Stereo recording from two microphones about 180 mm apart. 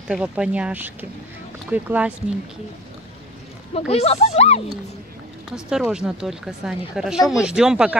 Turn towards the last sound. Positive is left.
turn(degrees=-5)  # may be behind; listen again after turning